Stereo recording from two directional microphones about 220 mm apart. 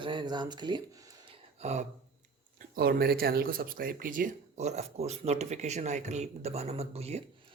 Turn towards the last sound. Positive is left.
turn(degrees=-30)  # may be behind; listen again after turning